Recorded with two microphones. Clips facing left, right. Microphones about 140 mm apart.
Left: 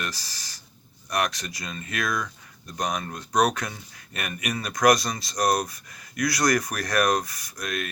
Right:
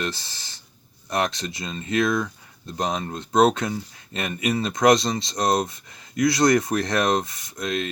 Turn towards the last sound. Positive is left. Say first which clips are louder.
# right 5 dB
turn(degrees=-25)  # may be behind; listen again after turning